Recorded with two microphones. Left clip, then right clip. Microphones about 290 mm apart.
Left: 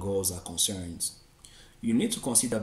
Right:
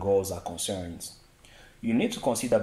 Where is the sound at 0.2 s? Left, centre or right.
Centre.